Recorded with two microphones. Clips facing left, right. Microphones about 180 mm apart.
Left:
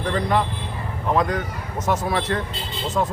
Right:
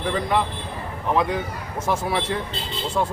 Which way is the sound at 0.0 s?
5° right (ahead or behind).